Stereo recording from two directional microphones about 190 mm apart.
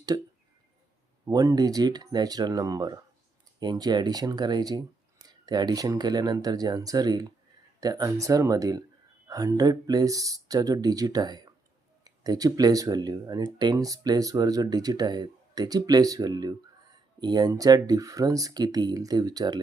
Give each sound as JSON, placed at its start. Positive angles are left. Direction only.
{"t": 0.1, "sound": "speech", "side_deg": -20}
{"t": 1.3, "sound": "speech", "side_deg": -20}